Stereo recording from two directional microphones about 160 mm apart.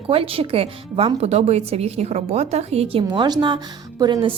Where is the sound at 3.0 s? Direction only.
25° right (ahead or behind).